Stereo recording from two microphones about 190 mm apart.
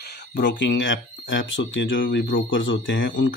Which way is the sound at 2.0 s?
50° left (ahead or behind).